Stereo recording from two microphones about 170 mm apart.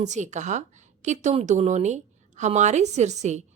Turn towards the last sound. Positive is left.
turn(degrees=-40)  # may be behind; listen again after turning